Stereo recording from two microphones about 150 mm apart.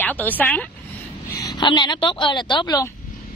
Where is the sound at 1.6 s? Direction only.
30° left (ahead or behind).